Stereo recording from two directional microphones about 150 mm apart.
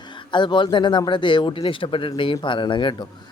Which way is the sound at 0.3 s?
30° left (ahead or behind).